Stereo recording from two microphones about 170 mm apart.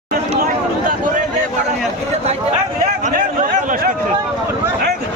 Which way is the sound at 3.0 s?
50° right (ahead or behind).